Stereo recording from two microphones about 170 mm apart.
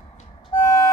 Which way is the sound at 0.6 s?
20° left (ahead or behind).